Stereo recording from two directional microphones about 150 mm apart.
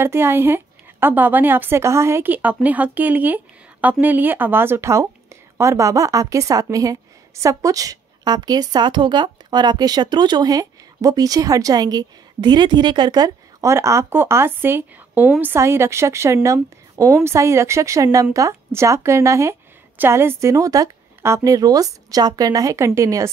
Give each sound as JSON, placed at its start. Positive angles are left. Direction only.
{"t": 0.0, "sound": "a woman's voice", "side_deg": -15}